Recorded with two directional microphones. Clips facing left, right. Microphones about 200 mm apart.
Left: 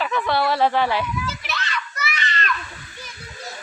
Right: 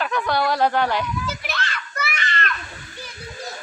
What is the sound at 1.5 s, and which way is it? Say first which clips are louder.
Children playing: even; 55° right (ahead or behind).